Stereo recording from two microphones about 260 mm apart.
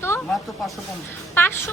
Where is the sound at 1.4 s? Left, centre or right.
Centre.